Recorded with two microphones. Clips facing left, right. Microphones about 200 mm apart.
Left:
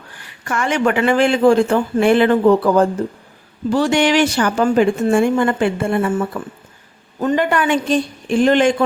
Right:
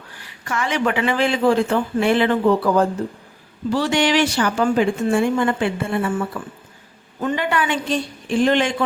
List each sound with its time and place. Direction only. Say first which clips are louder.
0.4 s speech: left 4 dB; 50° left (ahead or behind)
7.2 s speech: left 5 dB; 40° left (ahead or behind)